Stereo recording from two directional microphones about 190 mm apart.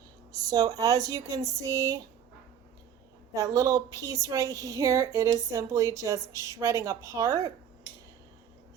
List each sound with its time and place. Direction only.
0.5 s speech: 20° right (ahead or behind)
3.3 s speech: 15° right (ahead or behind)